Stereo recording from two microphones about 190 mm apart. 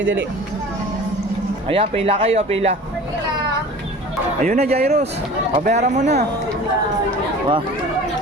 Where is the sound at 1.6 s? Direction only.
30° right (ahead or behind).